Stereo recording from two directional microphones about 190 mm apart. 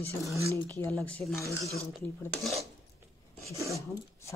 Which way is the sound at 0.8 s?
5° left (ahead or behind).